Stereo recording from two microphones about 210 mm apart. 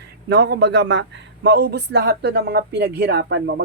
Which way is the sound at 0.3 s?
50° right (ahead or behind).